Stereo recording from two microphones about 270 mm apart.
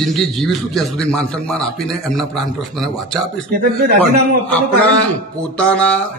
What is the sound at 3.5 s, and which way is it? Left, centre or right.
Speech, right.